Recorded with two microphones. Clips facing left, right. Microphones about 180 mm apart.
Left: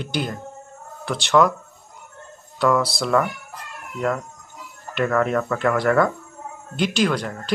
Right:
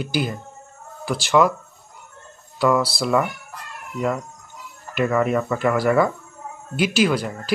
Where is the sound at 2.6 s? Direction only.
5° right (ahead or behind).